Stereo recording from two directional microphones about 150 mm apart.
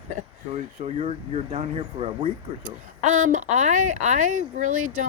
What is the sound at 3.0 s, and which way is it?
Speech, 55° right (ahead or behind).